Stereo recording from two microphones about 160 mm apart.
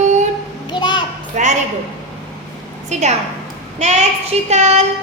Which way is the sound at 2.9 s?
45° right (ahead or behind).